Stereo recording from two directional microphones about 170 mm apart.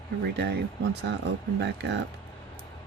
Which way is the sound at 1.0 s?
90° right.